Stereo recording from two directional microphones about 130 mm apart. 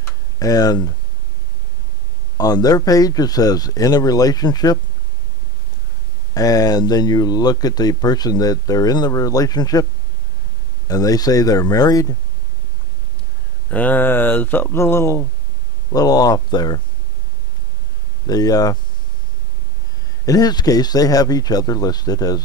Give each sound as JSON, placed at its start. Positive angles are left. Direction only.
{"t": 0.4, "sound": "speech", "side_deg": 30}
{"t": 2.3, "sound": "speech", "side_deg": 30}
{"t": 6.3, "sound": "speech", "side_deg": 30}
{"t": 10.9, "sound": "speech", "side_deg": 30}
{"t": 13.7, "sound": "speech", "side_deg": 10}
{"t": 18.2, "sound": "speech", "side_deg": 30}
{"t": 20.2, "sound": "speech", "side_deg": 30}